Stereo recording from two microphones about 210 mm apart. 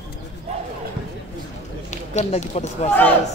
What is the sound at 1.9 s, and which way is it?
Speech, 35° left (ahead or behind).